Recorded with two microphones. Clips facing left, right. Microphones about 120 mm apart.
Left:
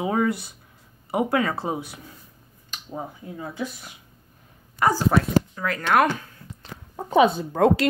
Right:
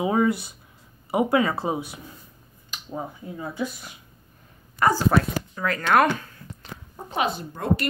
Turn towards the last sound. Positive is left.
turn(degrees=90)